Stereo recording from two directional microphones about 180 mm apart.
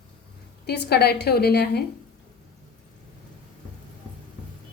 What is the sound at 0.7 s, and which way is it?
A woman's voice, 60° left (ahead or behind).